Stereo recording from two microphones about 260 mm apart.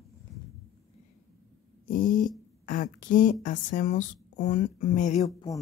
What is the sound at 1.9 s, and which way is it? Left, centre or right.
Speech, left.